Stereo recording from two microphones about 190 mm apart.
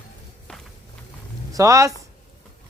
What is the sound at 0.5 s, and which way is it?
Walk, 5° left (ahead or behind).